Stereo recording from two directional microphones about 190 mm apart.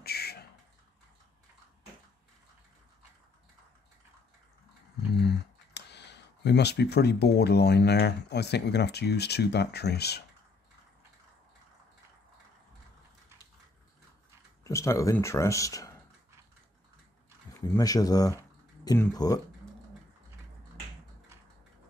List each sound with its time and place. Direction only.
0.0 s a sound: 55° left (ahead or behind)
5.2 s speech: 60° left (ahead or behind)
14.6 s speech: 15° left (ahead or behind)
17.6 s speech: 15° left (ahead or behind)